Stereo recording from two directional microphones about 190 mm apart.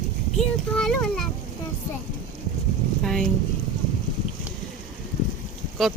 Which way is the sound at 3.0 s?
Centre (ahead or behind).